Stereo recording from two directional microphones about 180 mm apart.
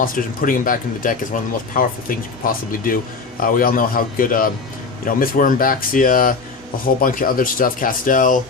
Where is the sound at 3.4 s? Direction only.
50° left (ahead or behind).